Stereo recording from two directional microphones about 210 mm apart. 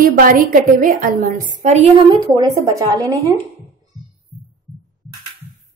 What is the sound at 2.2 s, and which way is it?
Speech, 20° right (ahead or behind).